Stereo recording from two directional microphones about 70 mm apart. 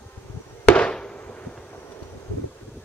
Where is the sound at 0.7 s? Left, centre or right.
Centre.